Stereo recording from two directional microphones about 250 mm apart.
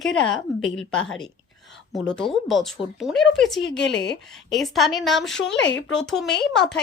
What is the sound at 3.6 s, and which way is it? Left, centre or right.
Speech, left.